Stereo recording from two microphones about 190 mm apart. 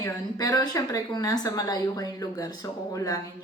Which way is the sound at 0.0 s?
20° left (ahead or behind).